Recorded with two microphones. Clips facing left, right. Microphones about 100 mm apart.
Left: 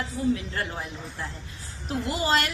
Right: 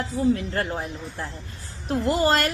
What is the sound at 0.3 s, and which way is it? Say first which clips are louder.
Speech: right 5 dB; 50° right (ahead or behind).